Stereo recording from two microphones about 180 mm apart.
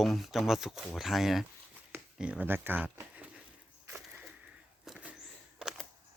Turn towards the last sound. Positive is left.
turn(degrees=-5)  # may be behind; listen again after turning